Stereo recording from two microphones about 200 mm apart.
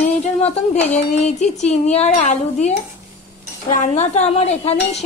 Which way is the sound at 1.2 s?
35° left (ahead or behind).